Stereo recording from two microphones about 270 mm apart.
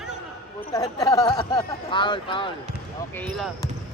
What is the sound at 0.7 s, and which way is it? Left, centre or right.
Speech, centre.